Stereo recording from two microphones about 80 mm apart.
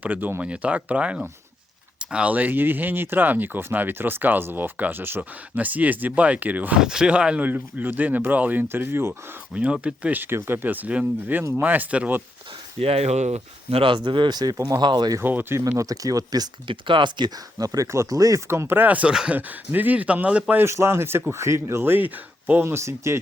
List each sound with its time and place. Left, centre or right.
0.0 s speech: right
6.7 s speech: centre; by 9.1 s right
9.6 s speech: centre
13.8 s speech: right
15.2 s speech: right
15.7 s speech: right
16.6 s speech: right; by 19.4 s centre
19.4 s speech: right
20.7 s speech: right
22.6 s speech: right